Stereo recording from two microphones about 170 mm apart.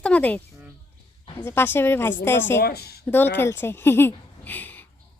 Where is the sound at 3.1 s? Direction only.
10° left (ahead or behind).